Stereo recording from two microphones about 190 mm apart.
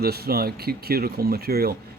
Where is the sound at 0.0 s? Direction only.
55° right (ahead or behind).